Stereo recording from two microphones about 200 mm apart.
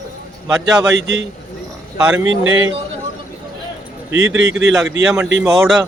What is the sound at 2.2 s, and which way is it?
Speech, 75° right (ahead or behind).